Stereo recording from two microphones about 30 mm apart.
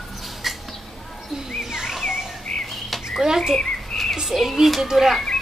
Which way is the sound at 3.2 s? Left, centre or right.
Centre.